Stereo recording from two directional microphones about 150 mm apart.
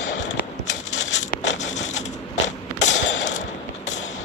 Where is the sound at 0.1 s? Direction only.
50° left (ahead or behind).